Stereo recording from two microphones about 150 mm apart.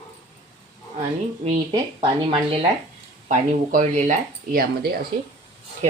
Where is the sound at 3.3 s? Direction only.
55° right (ahead or behind); by 5.0 s 80° right.